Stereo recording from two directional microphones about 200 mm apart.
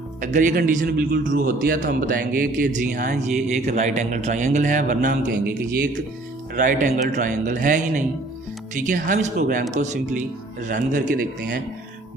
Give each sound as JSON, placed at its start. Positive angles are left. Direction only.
{"t": 0.2, "sound": "a man's voice", "side_deg": -40}
{"t": 6.6, "sound": "a man's voice", "side_deg": -40}